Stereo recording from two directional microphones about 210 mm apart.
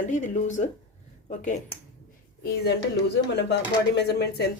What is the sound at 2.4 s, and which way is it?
Speech, 50° left (ahead or behind).